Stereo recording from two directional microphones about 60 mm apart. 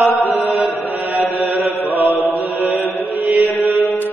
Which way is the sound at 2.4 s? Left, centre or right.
Right.